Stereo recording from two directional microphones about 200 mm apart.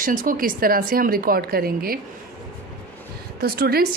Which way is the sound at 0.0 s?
45° right (ahead or behind).